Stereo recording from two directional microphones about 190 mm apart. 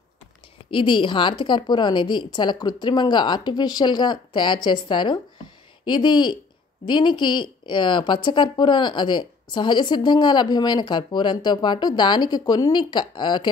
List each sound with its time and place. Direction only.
0.7 s a woman's voice: 25° left (ahead or behind)